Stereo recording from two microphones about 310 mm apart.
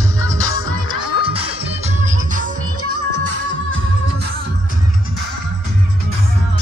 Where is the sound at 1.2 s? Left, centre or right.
Centre.